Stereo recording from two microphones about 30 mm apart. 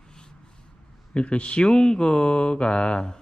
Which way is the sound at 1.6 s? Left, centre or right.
Left.